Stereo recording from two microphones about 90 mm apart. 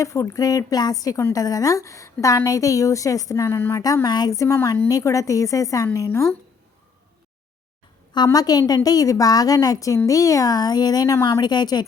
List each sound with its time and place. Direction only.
0.0 s a woman's voice: 35° left (ahead or behind)
3.8 s a woman's voice: 40° left (ahead or behind)
8.1 s a woman's voice: 50° left (ahead or behind)
11.3 s a woman's voice: 50° left (ahead or behind)